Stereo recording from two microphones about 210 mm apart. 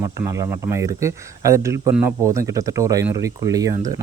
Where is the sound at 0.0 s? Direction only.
15° right (ahead or behind).